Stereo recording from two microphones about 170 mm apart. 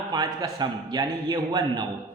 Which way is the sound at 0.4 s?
25° right (ahead or behind).